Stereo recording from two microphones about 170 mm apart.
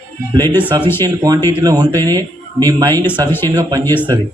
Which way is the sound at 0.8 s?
15° left (ahead or behind).